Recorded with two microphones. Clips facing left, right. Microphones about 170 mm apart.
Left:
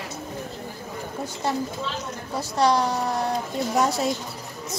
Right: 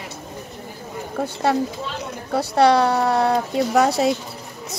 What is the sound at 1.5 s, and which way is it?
Speech, 70° right (ahead or behind).